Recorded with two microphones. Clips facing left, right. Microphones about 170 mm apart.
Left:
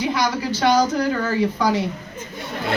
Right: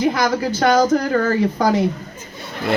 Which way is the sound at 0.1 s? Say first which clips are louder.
Right 3 dB; 50° right (ahead or behind).